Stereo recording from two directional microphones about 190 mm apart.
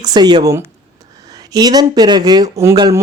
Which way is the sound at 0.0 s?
20° right (ahead or behind).